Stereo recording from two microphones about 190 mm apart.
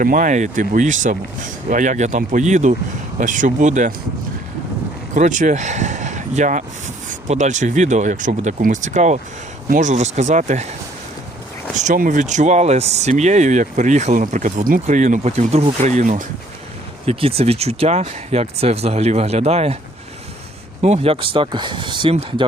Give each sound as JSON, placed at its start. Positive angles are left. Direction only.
{"t": 0.0, "sound": "speech", "side_deg": -45}
{"t": 5.1, "sound": "speech", "side_deg": -40}
{"t": 20.8, "sound": "speech", "side_deg": -35}